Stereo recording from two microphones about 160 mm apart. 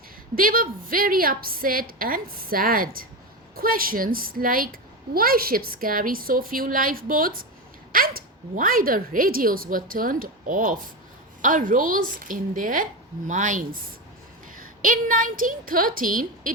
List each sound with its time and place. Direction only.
0.3 s a child's voice: 60° right (ahead or behind)